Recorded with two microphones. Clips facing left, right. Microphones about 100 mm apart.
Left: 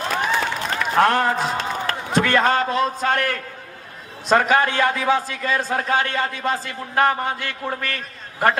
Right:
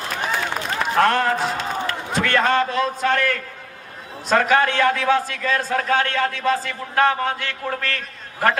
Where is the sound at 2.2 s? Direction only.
15° left (ahead or behind).